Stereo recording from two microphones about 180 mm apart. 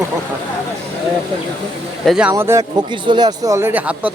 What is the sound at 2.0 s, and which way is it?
Speech, 5° right (ahead or behind).